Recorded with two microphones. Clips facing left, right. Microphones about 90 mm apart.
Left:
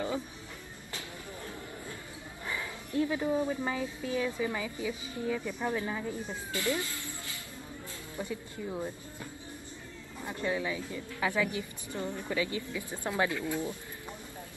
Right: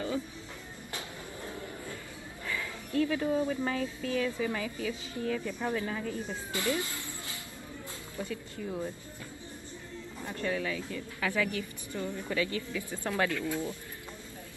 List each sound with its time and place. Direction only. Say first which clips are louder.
2.4 s speech: right 1 dB; 20° left (ahead or behind)
6.5 s speech: even; 20° right (ahead or behind)
8.2 s speech: even; 15° left (ahead or behind)
10.2 s speech: left 1 dB; 20° left (ahead or behind)